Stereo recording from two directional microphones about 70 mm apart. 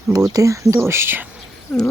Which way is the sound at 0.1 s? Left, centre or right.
Right.